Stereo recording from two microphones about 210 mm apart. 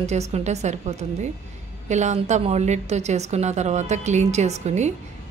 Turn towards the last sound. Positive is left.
turn(degrees=-35)  # may be behind; listen again after turning